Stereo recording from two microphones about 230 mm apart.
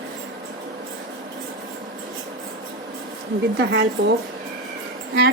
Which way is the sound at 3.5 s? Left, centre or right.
Right.